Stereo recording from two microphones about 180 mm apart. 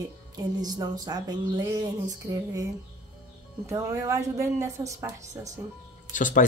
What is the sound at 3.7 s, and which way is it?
A woman's voice, 15° right (ahead or behind).